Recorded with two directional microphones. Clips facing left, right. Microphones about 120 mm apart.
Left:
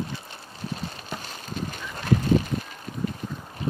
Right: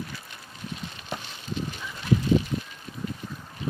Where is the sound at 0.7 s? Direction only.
40° left (ahead or behind).